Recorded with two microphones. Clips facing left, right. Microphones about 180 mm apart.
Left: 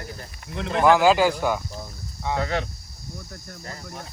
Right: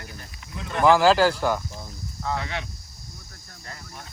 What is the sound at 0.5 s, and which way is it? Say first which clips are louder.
Speech: left 6 dB; 65° left (ahead or behind).